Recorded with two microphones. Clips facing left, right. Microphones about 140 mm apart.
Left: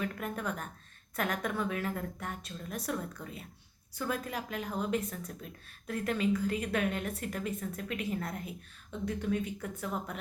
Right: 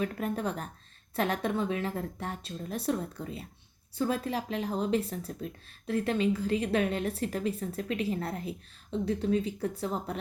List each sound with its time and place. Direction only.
0.0 s a woman's voice: 30° right (ahead or behind)